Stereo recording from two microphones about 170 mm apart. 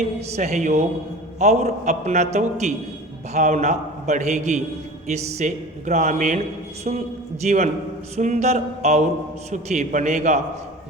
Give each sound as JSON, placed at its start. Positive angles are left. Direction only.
{"t": 0.3, "sound": "a man's voice", "side_deg": -45}
{"t": 7.4, "sound": "a man's voice", "side_deg": -45}
{"t": 8.1, "sound": "mantra", "side_deg": -40}
{"t": 9.5, "sound": "a man's voice", "side_deg": -45}